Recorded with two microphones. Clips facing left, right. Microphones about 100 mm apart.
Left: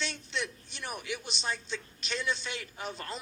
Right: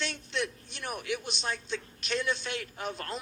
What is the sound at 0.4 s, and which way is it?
A man's voice, 55° right (ahead or behind).